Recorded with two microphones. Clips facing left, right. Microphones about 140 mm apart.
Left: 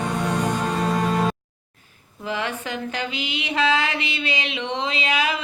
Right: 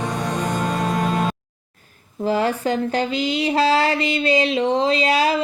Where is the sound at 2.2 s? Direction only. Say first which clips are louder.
Right 8 dB; 40° right (ahead or behind).